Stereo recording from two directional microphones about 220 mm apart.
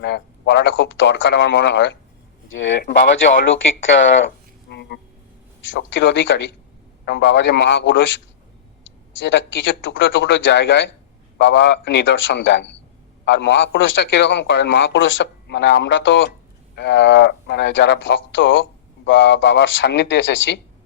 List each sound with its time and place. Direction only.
0.0 s a man's voice: 50° left (ahead or behind)
4.7 s a sound: 50° left (ahead or behind)
5.7 s a man's voice: 55° left (ahead or behind)
9.2 s a man's voice: 55° left (ahead or behind)